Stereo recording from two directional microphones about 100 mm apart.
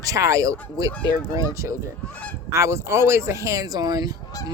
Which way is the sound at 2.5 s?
25° right (ahead or behind).